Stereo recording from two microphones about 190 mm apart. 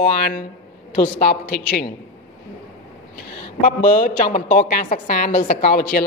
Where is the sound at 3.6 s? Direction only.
45° left (ahead or behind).